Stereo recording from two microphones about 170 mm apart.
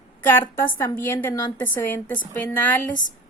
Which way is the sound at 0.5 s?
15° left (ahead or behind).